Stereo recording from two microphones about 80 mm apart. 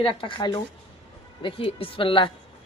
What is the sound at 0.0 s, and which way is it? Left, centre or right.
Speech, left.